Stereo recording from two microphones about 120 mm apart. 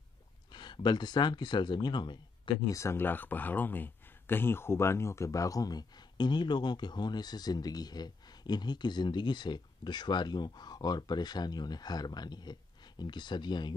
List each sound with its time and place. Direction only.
0.5 s speech: 40° left (ahead or behind)
2.7 s speech: 25° left (ahead or behind)